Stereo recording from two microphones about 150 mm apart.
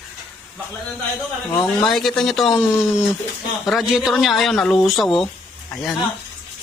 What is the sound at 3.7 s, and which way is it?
Speech, centre (ahead or behind).